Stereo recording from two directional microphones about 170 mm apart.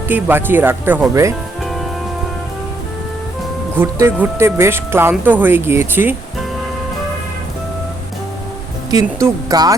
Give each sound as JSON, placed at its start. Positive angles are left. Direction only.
{"t": 0.1, "sound": "speech", "side_deg": -10}
{"t": 1.6, "sound": "music", "side_deg": 0}
{"t": 3.8, "sound": "speech", "side_deg": -15}
{"t": 8.9, "sound": "speech", "side_deg": -20}